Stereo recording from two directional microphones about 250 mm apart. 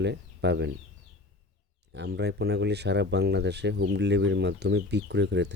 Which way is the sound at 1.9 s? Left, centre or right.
Right.